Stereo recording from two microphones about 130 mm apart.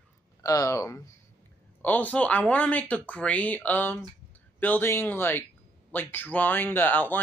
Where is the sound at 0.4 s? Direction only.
25° left (ahead or behind).